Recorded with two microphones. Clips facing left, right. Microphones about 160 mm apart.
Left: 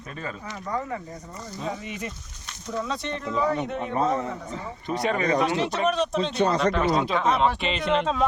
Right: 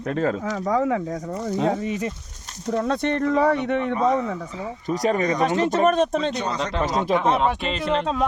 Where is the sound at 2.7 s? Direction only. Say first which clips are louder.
Right 7 dB; 55° right (ahead or behind).